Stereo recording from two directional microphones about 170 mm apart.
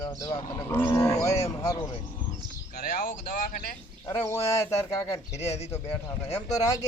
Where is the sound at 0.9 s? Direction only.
20° left (ahead or behind).